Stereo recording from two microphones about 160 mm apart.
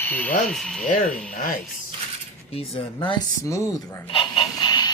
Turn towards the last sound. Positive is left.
turn(degrees=25)  # may be behind; listen again after turning